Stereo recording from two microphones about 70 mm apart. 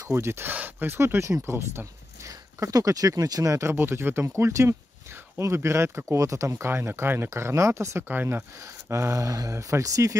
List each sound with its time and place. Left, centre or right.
0.1 s speech: right
2.2 s speech: right
3.7 s speech: right
8.1 s speech: right
8.9 s speech: right